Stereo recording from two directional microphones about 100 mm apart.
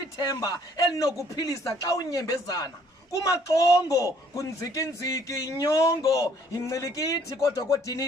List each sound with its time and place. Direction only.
0.2 s a man's voice: 40° left (ahead or behind)